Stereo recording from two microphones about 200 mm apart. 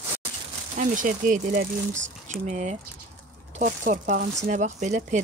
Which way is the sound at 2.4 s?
35° right (ahead or behind).